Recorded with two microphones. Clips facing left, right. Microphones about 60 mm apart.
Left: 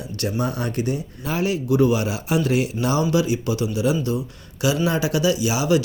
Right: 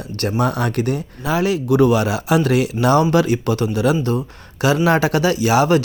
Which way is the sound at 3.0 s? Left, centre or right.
Right.